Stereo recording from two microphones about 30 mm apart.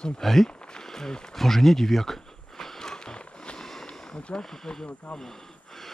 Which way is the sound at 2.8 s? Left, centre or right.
Left.